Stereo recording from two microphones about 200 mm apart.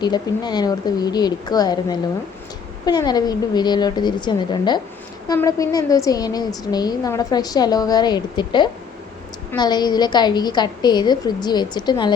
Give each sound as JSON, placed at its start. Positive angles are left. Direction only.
{"t": 0.0, "sound": "a woman's voice", "side_deg": 20}